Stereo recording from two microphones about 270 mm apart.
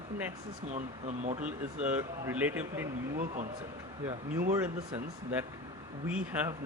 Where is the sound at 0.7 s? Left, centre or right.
Right.